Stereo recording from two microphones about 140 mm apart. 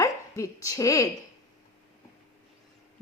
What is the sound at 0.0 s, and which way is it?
Speech, 20° left (ahead or behind).